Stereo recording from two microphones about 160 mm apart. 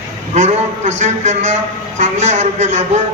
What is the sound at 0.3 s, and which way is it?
A man's voice, 45° right (ahead or behind).